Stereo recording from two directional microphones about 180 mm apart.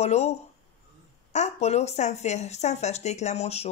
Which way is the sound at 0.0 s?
40° left (ahead or behind).